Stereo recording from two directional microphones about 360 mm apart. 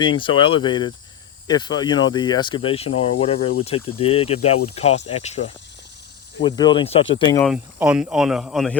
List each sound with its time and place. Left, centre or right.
0.0 s speech: centre
7.4 s speech: centre